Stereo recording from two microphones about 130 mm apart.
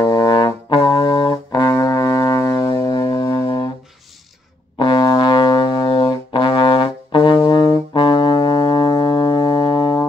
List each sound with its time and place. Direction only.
0.0 s brass instrument: 25° left (ahead or behind)
4.7 s music: 40° left (ahead or behind)